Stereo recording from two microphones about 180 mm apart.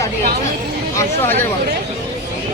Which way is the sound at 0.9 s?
15° left (ahead or behind).